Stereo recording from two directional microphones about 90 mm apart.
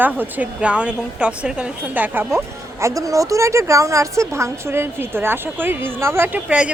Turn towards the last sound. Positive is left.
turn(degrees=-15)  # may be behind; listen again after turning